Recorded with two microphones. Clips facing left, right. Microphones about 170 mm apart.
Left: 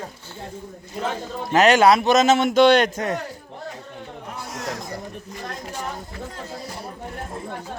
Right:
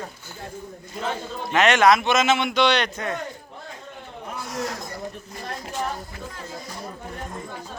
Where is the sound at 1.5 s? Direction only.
35° left (ahead or behind).